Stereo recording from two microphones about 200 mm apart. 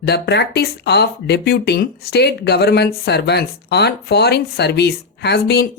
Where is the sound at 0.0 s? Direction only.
55° left (ahead or behind).